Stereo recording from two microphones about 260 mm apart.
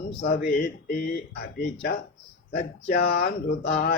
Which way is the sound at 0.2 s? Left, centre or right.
Left.